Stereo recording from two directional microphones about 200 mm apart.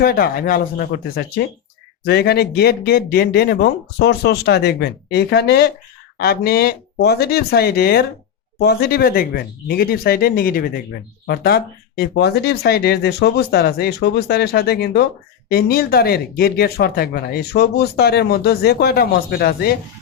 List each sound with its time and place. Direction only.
0.0 s speech: 50° left (ahead or behind)